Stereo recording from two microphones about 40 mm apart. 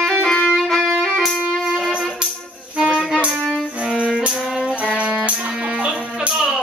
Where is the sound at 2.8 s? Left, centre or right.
Centre.